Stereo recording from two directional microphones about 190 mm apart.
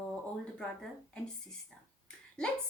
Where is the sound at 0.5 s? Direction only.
5° left (ahead or behind).